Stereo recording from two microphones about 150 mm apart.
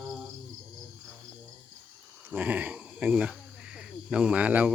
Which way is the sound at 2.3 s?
10° right (ahead or behind).